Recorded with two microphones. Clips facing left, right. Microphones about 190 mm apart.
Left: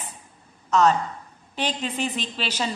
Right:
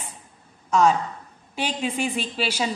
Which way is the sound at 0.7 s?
10° right (ahead or behind).